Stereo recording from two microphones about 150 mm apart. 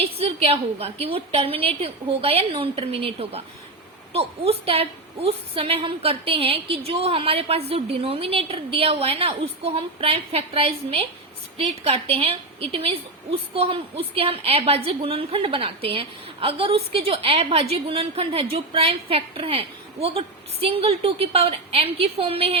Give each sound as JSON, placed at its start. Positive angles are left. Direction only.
{"t": 0.0, "sound": "a woman's voice", "side_deg": -40}